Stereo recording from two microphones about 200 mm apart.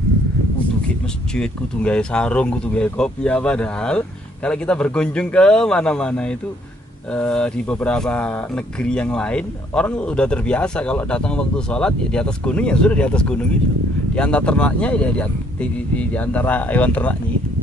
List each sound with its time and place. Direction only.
1.3 s speech: 5° left (ahead or behind)